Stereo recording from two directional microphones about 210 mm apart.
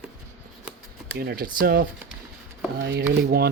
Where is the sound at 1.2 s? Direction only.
45° right (ahead or behind).